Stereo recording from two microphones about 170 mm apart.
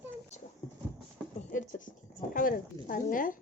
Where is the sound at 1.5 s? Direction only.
50° left (ahead or behind).